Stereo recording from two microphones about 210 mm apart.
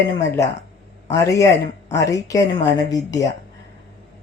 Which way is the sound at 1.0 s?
15° left (ahead or behind).